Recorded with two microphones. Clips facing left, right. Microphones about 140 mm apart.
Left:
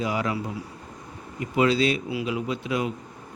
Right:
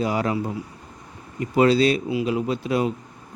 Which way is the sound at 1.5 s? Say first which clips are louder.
Right 4 dB; 40° right (ahead or behind).